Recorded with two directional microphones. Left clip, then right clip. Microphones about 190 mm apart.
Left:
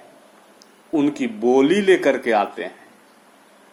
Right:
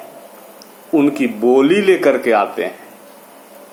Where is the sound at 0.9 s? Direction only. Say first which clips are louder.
Right 6 dB; 35° left (ahead or behind).